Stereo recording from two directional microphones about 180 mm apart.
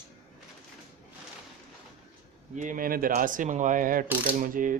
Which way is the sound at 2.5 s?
45° right (ahead or behind).